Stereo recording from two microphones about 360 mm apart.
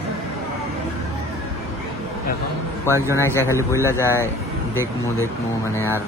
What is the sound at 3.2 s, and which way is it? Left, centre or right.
Speech, centre.